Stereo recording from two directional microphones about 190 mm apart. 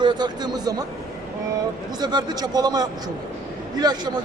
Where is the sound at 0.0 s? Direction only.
25° right (ahead or behind).